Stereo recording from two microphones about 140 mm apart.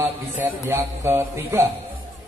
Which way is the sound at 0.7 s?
20° right (ahead or behind).